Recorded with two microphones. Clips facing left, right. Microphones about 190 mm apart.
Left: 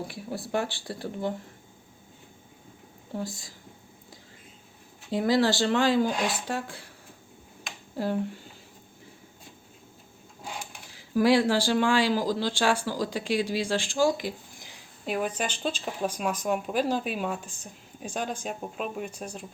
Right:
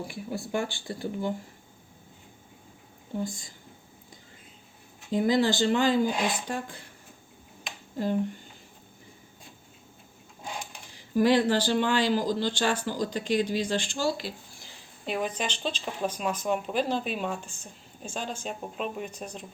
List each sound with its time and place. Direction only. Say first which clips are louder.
0.1 s speech: left 1 dB; centre (ahead or behind)
3.2 s speech: right 2 dB; centre (ahead or behind)
5.3 s speech: left 1 dB; centre (ahead or behind)
7.9 s speech: right 1 dB; 5° left (ahead or behind)
10.9 s speech: left 1 dB; 5° left (ahead or behind)